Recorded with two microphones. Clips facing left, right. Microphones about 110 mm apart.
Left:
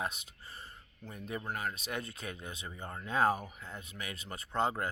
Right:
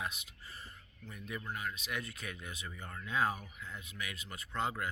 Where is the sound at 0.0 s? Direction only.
35° left (ahead or behind).